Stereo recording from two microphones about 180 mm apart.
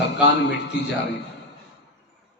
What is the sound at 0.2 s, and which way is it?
A man's voice, 75° left (ahead or behind).